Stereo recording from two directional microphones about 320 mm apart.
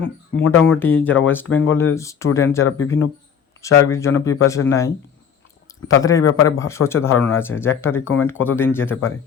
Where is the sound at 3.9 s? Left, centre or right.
Centre.